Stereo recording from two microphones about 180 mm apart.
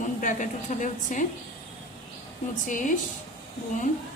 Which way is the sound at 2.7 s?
45° left (ahead or behind).